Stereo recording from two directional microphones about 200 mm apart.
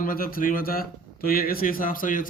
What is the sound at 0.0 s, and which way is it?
Speech, 45° left (ahead or behind).